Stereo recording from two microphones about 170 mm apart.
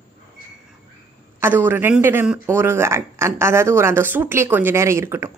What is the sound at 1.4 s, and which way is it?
Speech, 10° right (ahead or behind).